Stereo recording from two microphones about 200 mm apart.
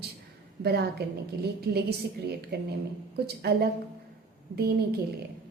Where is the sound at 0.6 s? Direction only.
55° right (ahead or behind).